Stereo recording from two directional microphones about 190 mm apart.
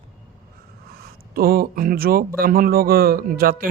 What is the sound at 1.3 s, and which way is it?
A man's voice, 50° right (ahead or behind).